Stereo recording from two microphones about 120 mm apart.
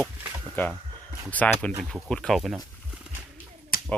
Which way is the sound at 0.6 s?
15° left (ahead or behind).